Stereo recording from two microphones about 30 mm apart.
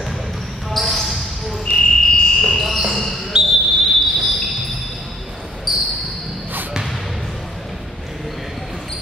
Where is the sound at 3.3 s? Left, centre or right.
Right.